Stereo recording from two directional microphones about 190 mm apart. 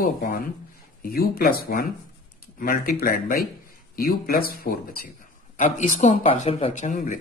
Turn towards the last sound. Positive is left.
turn(degrees=45)  # may be behind; listen again after turning